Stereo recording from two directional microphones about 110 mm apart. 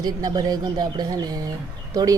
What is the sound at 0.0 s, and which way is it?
Speech, 40° right (ahead or behind).